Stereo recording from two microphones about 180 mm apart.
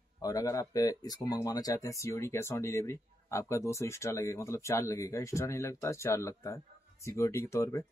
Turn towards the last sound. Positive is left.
turn(degrees=15)  # may be behind; listen again after turning